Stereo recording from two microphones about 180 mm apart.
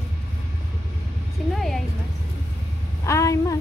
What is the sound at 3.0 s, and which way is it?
Speech, 15° left (ahead or behind).